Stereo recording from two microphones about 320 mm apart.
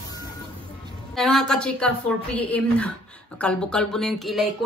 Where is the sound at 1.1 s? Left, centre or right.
Centre.